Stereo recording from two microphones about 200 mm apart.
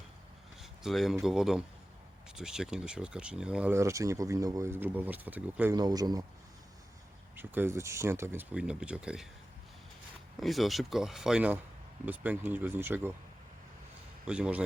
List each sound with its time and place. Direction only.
0.6 s a sound: centre (ahead or behind)
1.2 s speech: centre (ahead or behind)
5.7 s speech: 20° right (ahead or behind)
7.3 s speech: 10° right (ahead or behind)
10.4 s speech: centre (ahead or behind)
14.3 s speech: 5° right (ahead or behind)